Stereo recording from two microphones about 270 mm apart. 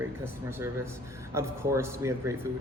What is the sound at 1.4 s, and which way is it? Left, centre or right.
Speech, centre.